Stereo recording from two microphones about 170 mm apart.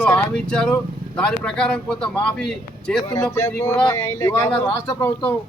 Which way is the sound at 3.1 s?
20° left (ahead or behind).